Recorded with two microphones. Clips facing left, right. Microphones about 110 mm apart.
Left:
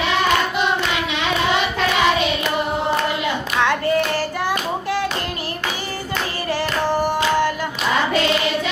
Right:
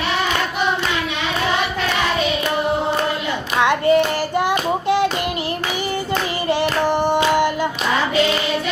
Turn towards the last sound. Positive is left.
turn(degrees=-20)  # may be behind; listen again after turning